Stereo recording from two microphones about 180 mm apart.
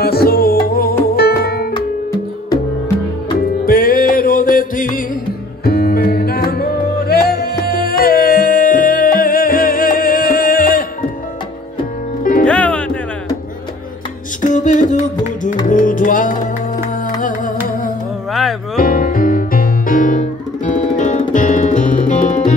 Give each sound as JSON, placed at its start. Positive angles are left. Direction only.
{"t": 0.0, "sound": "music", "side_deg": 60}
{"t": 3.6, "sound": "music", "side_deg": 50}
{"t": 12.4, "sound": "music", "side_deg": 5}
{"t": 14.4, "sound": "music", "side_deg": 45}
{"t": 18.8, "sound": "music", "side_deg": 50}